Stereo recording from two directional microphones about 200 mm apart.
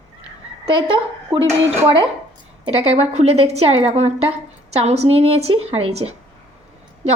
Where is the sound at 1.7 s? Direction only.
25° right (ahead or behind).